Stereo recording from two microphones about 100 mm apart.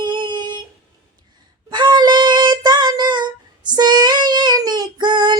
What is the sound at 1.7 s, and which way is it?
Child singing, 50° right (ahead or behind).